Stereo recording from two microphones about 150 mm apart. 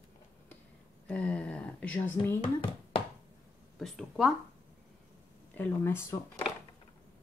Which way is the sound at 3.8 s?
Centre (ahead or behind).